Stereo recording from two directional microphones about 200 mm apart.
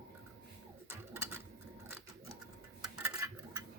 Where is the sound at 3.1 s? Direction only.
15° right (ahead or behind).